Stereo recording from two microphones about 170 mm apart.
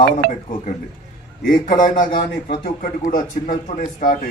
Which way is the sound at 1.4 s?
55° left (ahead or behind).